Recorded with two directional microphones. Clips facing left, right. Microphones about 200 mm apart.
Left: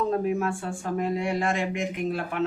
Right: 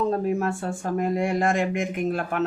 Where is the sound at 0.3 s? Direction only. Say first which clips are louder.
Right 2 dB; 40° right (ahead or behind).